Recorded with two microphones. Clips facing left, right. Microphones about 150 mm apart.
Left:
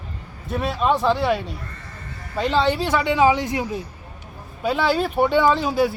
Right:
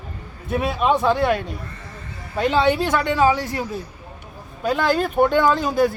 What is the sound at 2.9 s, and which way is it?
Speech, 5° left (ahead or behind).